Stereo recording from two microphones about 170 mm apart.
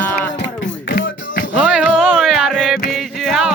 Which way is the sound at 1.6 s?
5° right (ahead or behind).